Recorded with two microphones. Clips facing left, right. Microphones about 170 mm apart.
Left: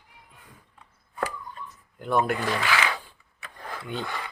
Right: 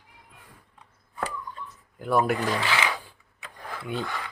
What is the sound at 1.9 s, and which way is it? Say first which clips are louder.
Speech: right 1 dB; 5° right (ahead or behind).